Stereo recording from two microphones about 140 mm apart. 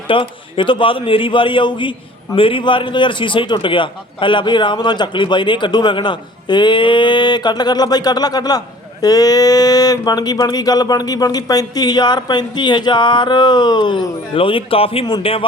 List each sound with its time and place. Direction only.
0.1 s a man's voice: 40° left (ahead or behind)